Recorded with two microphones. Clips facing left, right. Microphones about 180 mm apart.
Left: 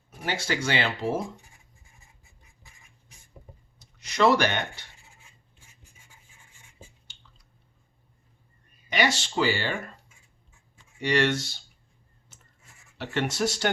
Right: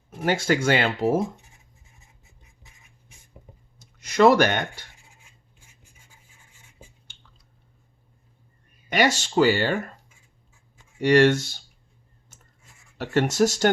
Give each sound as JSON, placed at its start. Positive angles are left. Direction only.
{"t": 0.2, "sound": "speech", "side_deg": -50}
{"t": 3.8, "sound": "speech", "side_deg": -50}
{"t": 7.1, "sound": "chewing", "side_deg": -55}
{"t": 8.9, "sound": "speech", "side_deg": -45}
{"t": 11.0, "sound": "speech", "side_deg": -45}
{"t": 13.0, "sound": "speech", "side_deg": -45}